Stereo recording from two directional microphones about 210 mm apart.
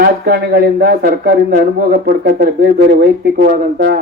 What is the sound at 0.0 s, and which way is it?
Speech, 50° right (ahead or behind).